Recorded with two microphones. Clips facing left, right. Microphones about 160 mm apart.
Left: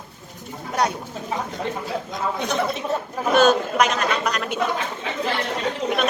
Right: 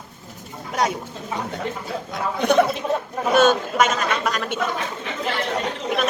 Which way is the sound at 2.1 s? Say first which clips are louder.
Right 7 dB; 60° right (ahead or behind).